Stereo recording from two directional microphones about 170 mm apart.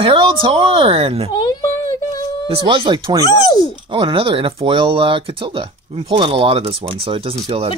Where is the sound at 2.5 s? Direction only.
30° right (ahead or behind).